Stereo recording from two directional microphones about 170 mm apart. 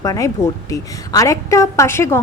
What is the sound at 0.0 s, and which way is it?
A woman's voice, 20° left (ahead or behind).